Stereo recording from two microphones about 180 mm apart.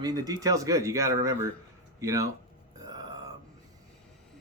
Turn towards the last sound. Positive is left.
turn(degrees=-20)  # may be behind; listen again after turning